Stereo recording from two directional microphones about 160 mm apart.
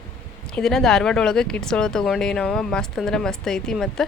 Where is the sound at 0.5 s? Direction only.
5° left (ahead or behind).